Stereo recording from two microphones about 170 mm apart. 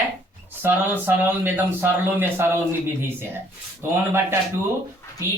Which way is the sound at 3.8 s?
15° right (ahead or behind).